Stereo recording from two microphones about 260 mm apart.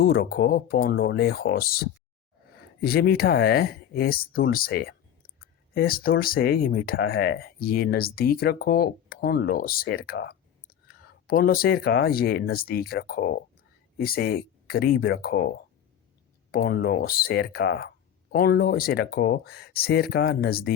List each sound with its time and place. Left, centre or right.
0.0 s speech: left